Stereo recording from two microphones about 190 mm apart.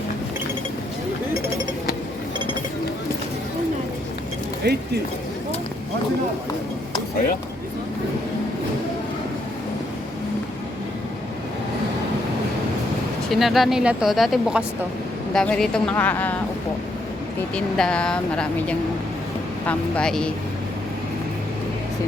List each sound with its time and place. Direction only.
4.6 s speech: 60° right (ahead or behind)
13.3 s a woman's voice: centre (ahead or behind)
17.5 s speech: 5° left (ahead or behind)